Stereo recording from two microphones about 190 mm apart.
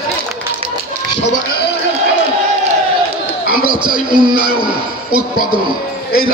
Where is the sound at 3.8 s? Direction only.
25° right (ahead or behind).